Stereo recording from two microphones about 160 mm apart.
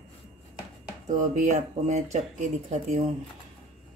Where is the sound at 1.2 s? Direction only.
50° right (ahead or behind).